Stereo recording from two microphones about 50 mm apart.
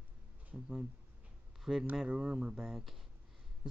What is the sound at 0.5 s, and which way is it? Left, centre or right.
Speech, right.